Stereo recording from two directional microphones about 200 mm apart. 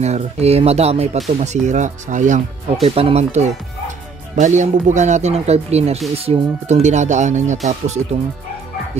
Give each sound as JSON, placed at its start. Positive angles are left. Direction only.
{"t": 0.0, "sound": "speech", "side_deg": -30}